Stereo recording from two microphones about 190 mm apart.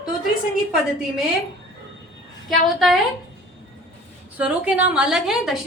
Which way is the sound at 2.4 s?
Centre (ahead or behind).